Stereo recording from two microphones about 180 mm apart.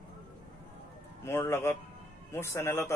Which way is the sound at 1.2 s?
15° left (ahead or behind).